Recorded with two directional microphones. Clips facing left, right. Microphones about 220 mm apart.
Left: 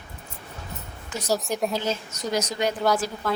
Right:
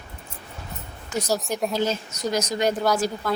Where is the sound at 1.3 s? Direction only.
Centre (ahead or behind).